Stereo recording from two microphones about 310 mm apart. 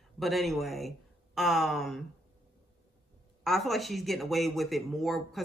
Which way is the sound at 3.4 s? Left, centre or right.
Centre.